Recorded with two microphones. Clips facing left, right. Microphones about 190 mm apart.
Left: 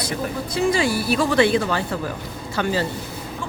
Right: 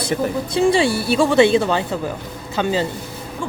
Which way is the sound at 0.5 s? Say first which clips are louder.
Right 4 dB; 30° right (ahead or behind).